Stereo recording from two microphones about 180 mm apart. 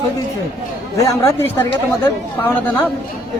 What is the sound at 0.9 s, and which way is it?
Speech, 15° left (ahead or behind).